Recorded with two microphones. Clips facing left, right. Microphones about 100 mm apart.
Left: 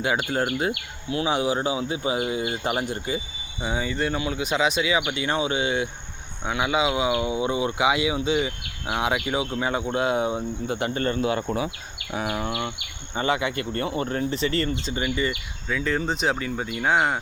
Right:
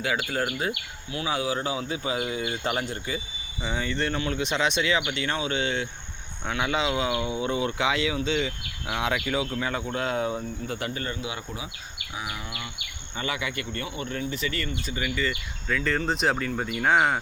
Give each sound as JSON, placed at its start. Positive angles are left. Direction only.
{"t": 0.0, "sound": "speech", "side_deg": 20}
{"t": 10.9, "sound": "speech", "side_deg": 45}
{"t": 12.1, "sound": "a sound", "side_deg": 55}
{"t": 13.1, "sound": "speech", "side_deg": 30}
{"t": 15.7, "sound": "speech", "side_deg": 5}